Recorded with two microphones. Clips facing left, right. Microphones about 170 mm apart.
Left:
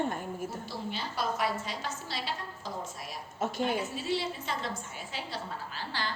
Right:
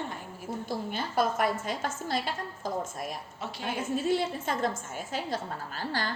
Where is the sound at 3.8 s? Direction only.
50° right (ahead or behind).